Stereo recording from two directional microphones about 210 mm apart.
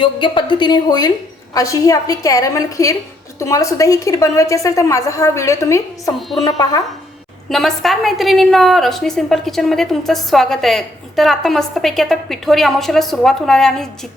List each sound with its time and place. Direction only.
0.0 s a woman's voice: 25° left (ahead or behind)
7.5 s a woman's voice: centre (ahead or behind)